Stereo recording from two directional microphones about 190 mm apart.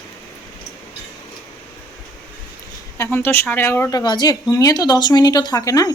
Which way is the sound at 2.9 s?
15° left (ahead or behind).